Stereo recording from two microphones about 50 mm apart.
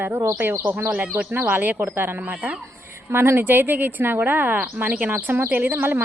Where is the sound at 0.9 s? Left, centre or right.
Right.